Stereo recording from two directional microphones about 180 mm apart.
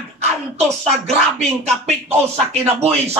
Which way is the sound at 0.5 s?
35° right (ahead or behind).